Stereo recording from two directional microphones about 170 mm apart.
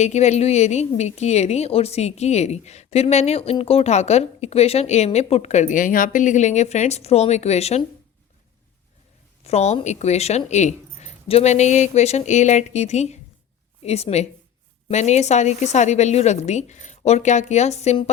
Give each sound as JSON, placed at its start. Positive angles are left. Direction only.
{"t": 0.0, "sound": "a woman's voice", "side_deg": 40}
{"t": 9.4, "sound": "a woman's voice", "side_deg": 40}